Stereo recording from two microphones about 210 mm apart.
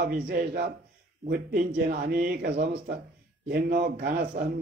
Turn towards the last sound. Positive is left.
turn(degrees=-45)  # may be behind; listen again after turning